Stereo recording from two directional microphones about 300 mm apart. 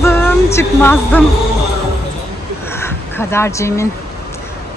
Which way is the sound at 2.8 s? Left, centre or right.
Centre.